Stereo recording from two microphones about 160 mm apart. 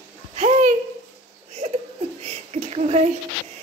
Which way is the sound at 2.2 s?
40° right (ahead or behind).